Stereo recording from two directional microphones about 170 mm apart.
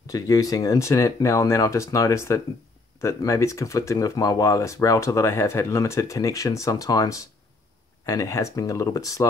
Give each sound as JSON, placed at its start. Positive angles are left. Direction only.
{"t": 0.0, "sound": "speech", "side_deg": 20}